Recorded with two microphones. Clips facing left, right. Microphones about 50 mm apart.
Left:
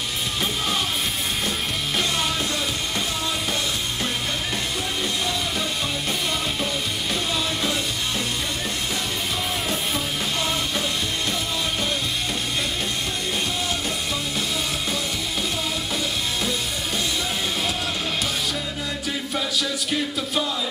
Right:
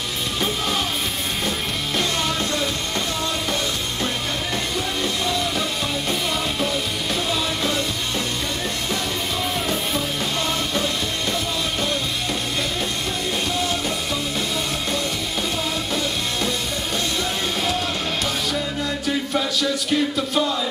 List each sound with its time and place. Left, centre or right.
5.0 s music: centre
19.0 s music: centre